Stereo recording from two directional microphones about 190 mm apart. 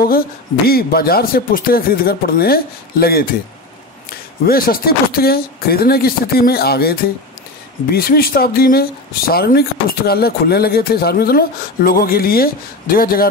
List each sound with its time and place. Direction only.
0.7 s speech: 55° left (ahead or behind)
4.5 s speech: 50° left (ahead or behind)